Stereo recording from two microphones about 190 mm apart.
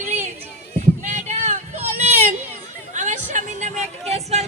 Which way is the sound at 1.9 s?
35° right (ahead or behind).